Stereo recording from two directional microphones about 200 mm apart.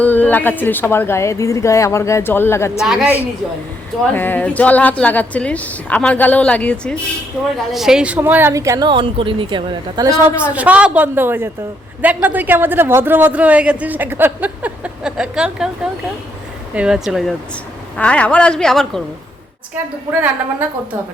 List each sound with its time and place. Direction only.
0.0 s a woman's voice: 10° left (ahead or behind)
2.7 s a woman's voice: centre (ahead or behind)
4.1 s a woman's voice: 10° left (ahead or behind)